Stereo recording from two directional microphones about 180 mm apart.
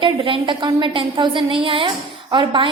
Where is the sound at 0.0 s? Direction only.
30° right (ahead or behind).